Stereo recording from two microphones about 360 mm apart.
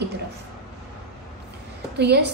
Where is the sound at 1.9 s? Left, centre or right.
Right.